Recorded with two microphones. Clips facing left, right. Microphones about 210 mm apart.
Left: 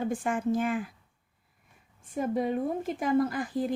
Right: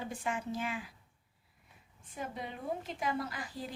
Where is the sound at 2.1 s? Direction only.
50° left (ahead or behind).